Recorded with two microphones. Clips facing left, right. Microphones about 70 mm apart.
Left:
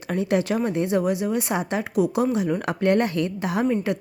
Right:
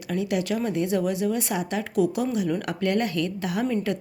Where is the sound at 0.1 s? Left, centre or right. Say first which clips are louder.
Left 3 dB; left.